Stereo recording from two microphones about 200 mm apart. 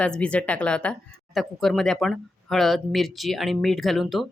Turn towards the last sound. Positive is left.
turn(degrees=0)  # may be behind; listen again after turning